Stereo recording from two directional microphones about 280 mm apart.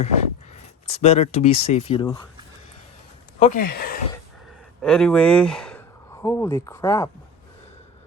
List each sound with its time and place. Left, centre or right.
0.5 s speech: left
3.4 s speech: left
4.8 s speech: centre